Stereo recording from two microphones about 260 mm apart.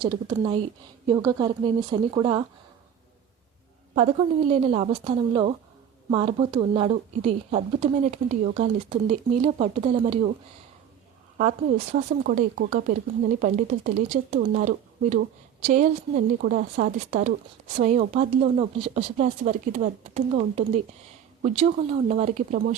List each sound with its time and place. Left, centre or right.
0.0 s speech: centre
3.9 s speech: right
11.3 s speech: right